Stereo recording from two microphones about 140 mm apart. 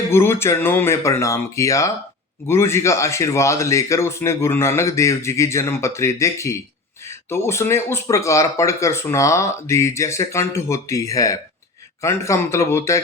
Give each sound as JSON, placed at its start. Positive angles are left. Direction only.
{"t": 0.1, "sound": "speech", "side_deg": 20}